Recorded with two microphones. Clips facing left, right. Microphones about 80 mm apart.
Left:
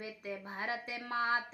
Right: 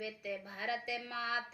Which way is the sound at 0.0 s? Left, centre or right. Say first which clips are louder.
Right 1 dB; left.